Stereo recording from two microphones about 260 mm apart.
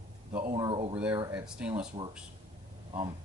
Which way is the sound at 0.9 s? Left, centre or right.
Centre.